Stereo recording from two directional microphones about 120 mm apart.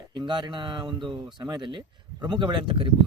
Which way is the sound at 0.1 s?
40° right (ahead or behind).